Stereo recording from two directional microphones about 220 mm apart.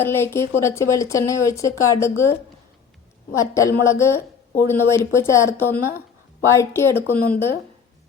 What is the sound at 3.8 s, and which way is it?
A woman's voice, 10° left (ahead or behind).